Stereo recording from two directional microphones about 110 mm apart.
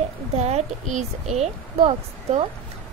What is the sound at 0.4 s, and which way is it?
Speech, 85° right.